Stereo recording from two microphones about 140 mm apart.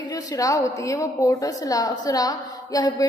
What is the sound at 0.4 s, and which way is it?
A woman's voice, 25° left (ahead or behind).